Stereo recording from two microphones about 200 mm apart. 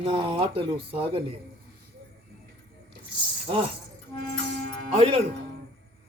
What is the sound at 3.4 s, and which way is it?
Speech, 25° right (ahead or behind).